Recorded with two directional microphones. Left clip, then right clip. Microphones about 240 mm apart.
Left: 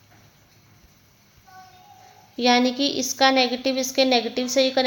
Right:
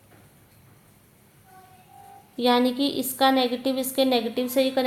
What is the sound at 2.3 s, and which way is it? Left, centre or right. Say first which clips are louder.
A woman's voice: left 2 dB; left.